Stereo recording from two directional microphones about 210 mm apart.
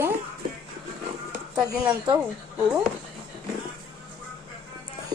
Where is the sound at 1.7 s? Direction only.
15° right (ahead or behind).